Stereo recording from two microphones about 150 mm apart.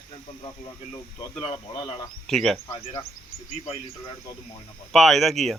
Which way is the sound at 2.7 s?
30° left (ahead or behind).